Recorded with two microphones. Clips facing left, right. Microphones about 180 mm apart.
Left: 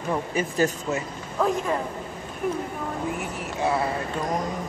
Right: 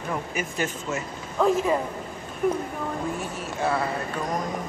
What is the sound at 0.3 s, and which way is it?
Speech, 30° left (ahead or behind).